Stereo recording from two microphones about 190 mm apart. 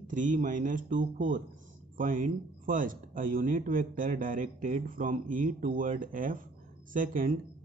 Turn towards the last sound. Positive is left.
turn(degrees=-45)  # may be behind; listen again after turning